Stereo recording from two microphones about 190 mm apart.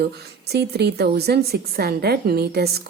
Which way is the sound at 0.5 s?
60° right (ahead or behind).